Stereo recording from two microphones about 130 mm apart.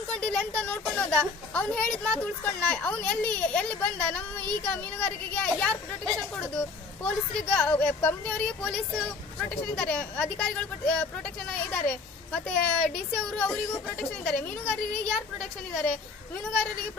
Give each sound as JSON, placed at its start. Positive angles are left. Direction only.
{"t": 0.1, "sound": "a sound", "side_deg": 10}
{"t": 0.9, "sound": "speech", "side_deg": 5}
{"t": 14.0, "sound": "speech", "side_deg": 10}